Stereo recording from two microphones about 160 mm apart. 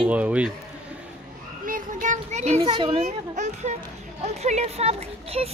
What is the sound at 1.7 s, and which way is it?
Child singing, 55° right (ahead or behind).